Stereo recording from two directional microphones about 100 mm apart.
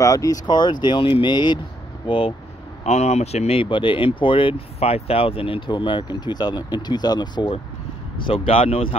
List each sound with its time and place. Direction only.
0.0 s speech: 35° left (ahead or behind)
2.0 s speech: 65° left (ahead or behind)
2.8 s speech: 90° left; by 7.5 s 50° left (ahead or behind)
8.3 s speech: 70° left (ahead or behind)